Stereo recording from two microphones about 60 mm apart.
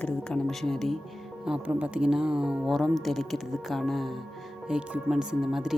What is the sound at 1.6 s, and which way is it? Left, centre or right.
Speech, right.